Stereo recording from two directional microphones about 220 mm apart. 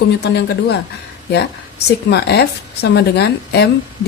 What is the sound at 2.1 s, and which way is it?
A woman's voice, 50° left (ahead or behind).